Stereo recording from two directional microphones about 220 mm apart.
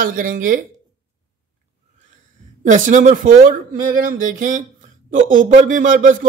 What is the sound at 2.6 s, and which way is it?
Speech, 35° right (ahead or behind).